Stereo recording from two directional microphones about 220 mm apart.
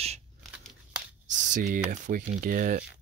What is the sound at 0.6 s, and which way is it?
Crumpling, 5° right (ahead or behind).